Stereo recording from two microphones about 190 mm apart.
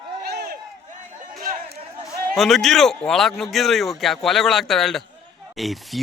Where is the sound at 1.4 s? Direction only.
45° right (ahead or behind).